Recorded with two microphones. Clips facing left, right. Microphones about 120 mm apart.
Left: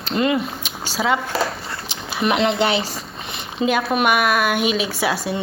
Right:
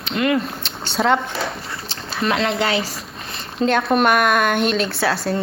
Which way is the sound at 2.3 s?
25° left (ahead or behind).